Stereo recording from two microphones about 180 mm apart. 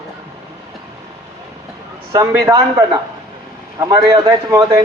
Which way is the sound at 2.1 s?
15° right (ahead or behind).